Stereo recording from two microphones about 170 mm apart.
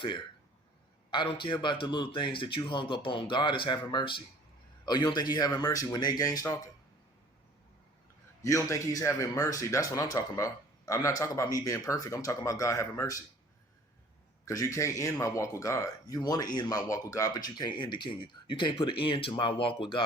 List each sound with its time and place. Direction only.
1.1 s speech: 30° left (ahead or behind)
8.4 s speech: 20° left (ahead or behind)
14.4 s speech: 20° left (ahead or behind)